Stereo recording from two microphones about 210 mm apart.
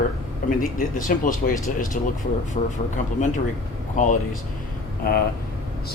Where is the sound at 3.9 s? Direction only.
35° left (ahead or behind).